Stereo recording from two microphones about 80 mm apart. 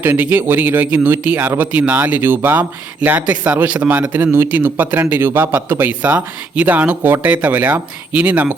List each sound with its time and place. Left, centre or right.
0.0 s a man's voice: right